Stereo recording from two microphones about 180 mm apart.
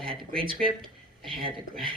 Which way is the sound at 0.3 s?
30° right (ahead or behind).